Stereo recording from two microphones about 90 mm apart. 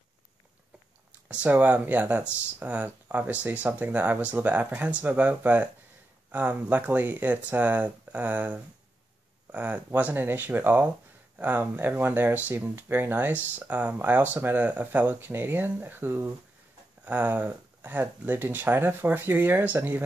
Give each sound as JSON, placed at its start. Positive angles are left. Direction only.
{"t": 1.3, "sound": "speech", "side_deg": -15}